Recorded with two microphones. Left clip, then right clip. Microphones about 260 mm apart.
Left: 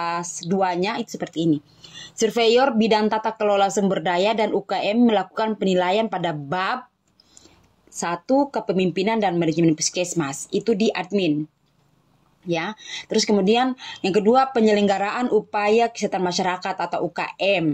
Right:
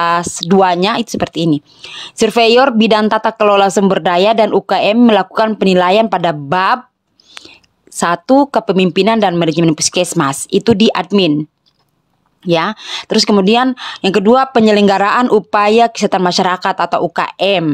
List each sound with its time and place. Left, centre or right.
0.0 s speech: right
12.4 s speech: right